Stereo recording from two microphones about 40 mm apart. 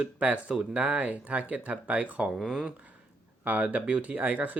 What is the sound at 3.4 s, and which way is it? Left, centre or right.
Speech, right.